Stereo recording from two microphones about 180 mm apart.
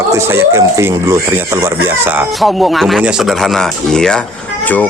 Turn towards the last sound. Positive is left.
turn(degrees=5)  # may be behind; listen again after turning